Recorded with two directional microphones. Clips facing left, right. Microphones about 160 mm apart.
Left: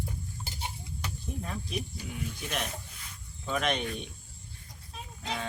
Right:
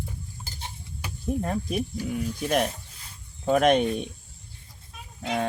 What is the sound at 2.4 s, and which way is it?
Stir, 40° right (ahead or behind).